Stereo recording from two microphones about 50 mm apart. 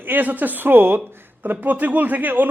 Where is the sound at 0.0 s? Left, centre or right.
Right.